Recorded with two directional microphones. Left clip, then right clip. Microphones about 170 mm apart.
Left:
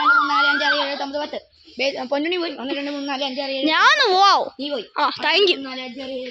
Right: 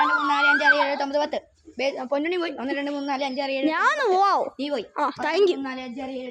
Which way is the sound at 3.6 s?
Centre (ahead or behind).